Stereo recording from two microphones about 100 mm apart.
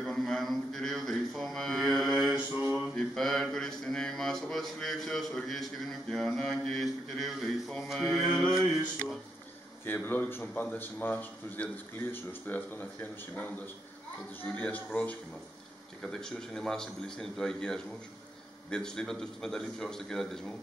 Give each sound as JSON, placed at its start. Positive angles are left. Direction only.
{"t": 0.0, "sound": "a sound", "side_deg": 5}
{"t": 3.0, "sound": "mantra", "side_deg": 0}
{"t": 9.8, "sound": "a man's voice", "side_deg": 20}